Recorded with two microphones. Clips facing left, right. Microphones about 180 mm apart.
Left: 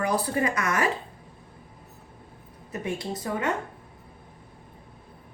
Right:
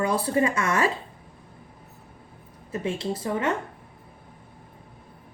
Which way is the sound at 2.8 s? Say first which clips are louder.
Right 3 dB; 25° right (ahead or behind).